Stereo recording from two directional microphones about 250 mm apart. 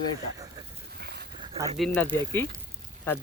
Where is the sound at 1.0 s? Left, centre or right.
Right.